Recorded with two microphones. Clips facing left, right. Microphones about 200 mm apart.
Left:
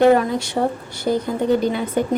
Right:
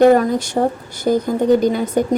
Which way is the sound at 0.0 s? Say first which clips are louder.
Right 3 dB; 40° right (ahead or behind).